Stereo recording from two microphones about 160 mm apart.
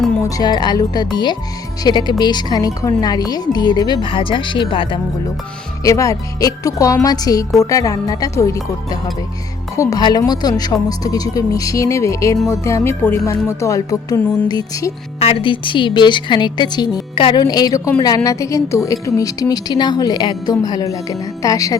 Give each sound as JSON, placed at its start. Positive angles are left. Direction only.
{"t": 0.2, "sound": "a woman's voice", "side_deg": 20}
{"t": 5.8, "sound": "a woman's voice", "side_deg": 20}
{"t": 15.2, "sound": "a woman's voice", "side_deg": 35}